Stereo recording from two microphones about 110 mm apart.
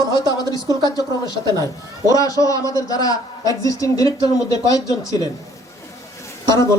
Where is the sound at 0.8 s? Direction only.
35° left (ahead or behind).